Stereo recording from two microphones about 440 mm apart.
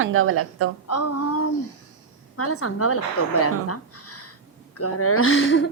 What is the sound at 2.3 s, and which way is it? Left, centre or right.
A woman's voice, left.